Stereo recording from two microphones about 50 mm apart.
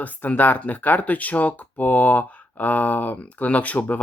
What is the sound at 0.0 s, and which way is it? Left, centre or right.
Speech, left.